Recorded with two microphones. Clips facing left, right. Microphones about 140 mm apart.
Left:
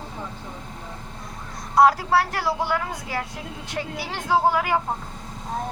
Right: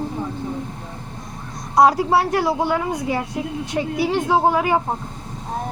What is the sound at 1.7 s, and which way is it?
A woman's voice, 15° right (ahead or behind).